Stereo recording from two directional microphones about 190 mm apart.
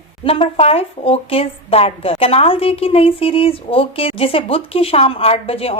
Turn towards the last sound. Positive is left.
turn(degrees=30)  # may be behind; listen again after turning